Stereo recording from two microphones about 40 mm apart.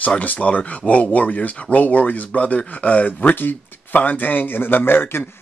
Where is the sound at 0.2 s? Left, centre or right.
Left.